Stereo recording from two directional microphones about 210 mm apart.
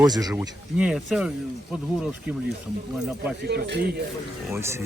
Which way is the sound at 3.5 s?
50° right (ahead or behind).